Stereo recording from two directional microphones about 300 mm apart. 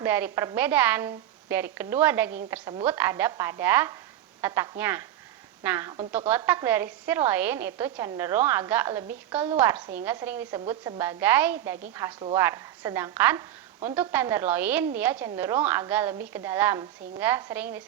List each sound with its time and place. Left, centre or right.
0.0 s a woman's voice: centre